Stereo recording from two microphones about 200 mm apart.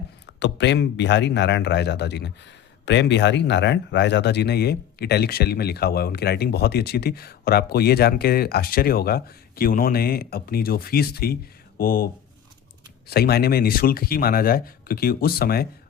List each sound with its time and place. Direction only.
0.3 s speech: 60° left (ahead or behind)
13.1 s speech: 50° left (ahead or behind)